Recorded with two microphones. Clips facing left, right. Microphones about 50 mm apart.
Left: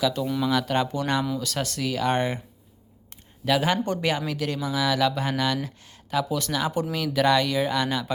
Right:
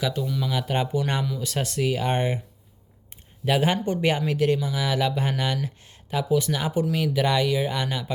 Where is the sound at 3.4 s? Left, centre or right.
Right.